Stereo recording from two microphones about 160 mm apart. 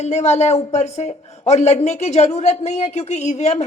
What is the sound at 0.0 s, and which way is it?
Speech, 45° left (ahead or behind).